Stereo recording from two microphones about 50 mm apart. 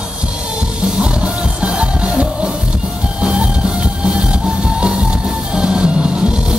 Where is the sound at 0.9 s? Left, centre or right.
Right.